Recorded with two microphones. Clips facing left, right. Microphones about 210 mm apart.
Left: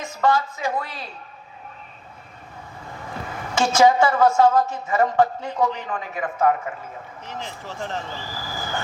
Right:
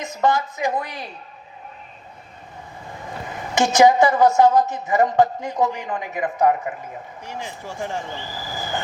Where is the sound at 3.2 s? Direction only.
20° right (ahead or behind).